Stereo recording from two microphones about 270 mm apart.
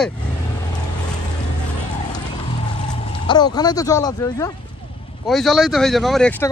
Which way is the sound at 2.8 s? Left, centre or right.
Left.